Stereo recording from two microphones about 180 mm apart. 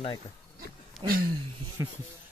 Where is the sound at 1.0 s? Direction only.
55° right (ahead or behind).